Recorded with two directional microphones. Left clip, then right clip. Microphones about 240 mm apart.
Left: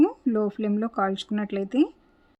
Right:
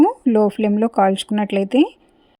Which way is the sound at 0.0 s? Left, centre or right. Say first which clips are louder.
Right 8 dB; right.